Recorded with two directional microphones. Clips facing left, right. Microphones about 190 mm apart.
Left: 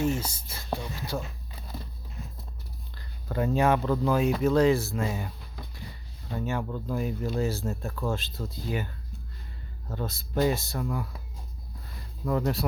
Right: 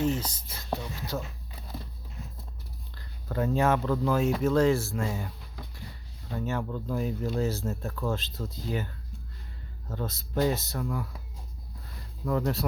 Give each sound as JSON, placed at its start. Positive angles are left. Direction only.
{"t": 0.0, "sound": "speech", "side_deg": 10}
{"t": 2.9, "sound": "speech", "side_deg": 15}
{"t": 6.3, "sound": "speech", "side_deg": 15}
{"t": 9.9, "sound": "speech", "side_deg": 15}
{"t": 11.9, "sound": "a sound", "side_deg": 10}